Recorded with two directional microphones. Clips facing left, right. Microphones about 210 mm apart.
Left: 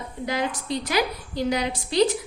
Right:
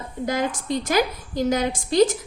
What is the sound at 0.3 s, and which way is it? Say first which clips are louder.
A woman's voice: right 2 dB; 45° right (ahead or behind).